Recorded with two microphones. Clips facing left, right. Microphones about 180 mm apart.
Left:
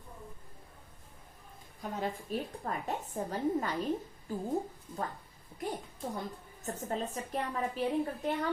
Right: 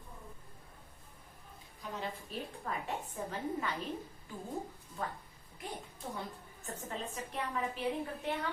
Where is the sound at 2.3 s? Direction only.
45° left (ahead or behind).